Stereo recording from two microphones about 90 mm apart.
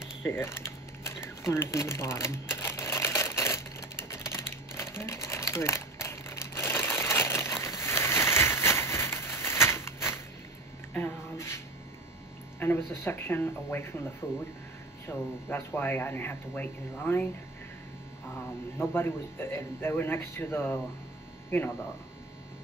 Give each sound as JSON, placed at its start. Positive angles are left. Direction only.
{"t": 0.2, "sound": "a sound", "side_deg": 25}
{"t": 4.1, "sound": "typing", "side_deg": 30}
{"t": 10.9, "sound": "a sound", "side_deg": 20}
{"t": 12.5, "sound": "speech", "side_deg": 25}
{"t": 15.0, "sound": "speech", "side_deg": 25}
{"t": 18.8, "sound": "speech", "side_deg": 25}